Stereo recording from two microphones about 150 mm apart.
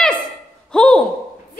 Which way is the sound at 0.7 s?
5° left (ahead or behind).